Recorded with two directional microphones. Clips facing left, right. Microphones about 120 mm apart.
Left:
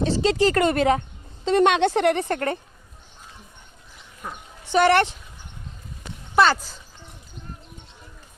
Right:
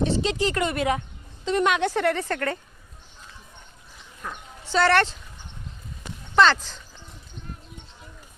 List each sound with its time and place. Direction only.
0.1 s a woman's voice: 35° left (ahead or behind); by 2.6 s 20° left (ahead or behind)
4.2 s a sound: 15° left (ahead or behind)
6.3 s speech: 10° left (ahead or behind)